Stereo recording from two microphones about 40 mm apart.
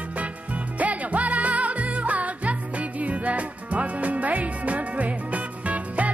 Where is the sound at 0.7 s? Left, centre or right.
Right.